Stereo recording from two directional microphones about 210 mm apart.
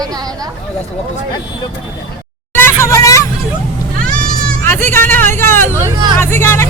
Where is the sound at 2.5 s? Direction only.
10° left (ahead or behind).